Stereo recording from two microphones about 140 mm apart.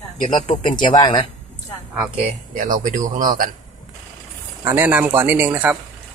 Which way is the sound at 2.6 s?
70° right (ahead or behind).